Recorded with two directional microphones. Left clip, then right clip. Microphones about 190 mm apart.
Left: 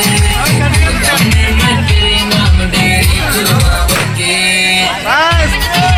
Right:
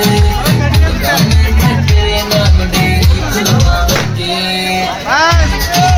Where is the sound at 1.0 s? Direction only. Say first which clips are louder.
Even; 55° right (ahead or behind).